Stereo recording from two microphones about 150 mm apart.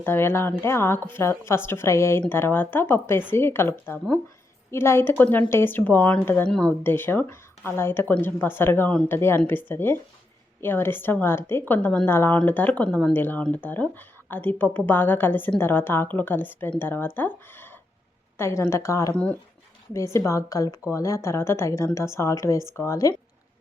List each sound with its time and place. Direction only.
0.0 s speech: 15° left (ahead or behind)
19.1 s speech: 10° left (ahead or behind)